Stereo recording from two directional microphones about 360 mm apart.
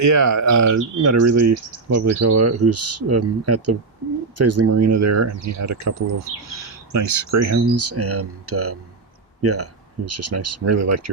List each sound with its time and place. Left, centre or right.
0.0 s speech: right
6.9 s speech: right